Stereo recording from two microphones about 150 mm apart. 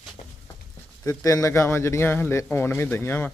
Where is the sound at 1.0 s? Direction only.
20° left (ahead or behind).